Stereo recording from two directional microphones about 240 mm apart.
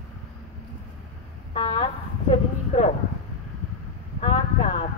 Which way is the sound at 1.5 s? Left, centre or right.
Left.